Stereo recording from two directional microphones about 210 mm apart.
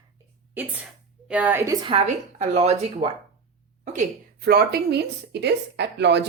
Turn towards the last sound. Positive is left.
turn(degrees=-55)  # may be behind; listen again after turning